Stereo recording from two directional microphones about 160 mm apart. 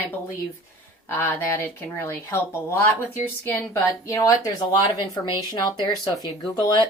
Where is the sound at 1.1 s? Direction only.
15° left (ahead or behind).